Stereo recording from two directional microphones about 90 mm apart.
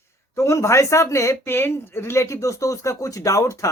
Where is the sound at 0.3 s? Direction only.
30° left (ahead or behind).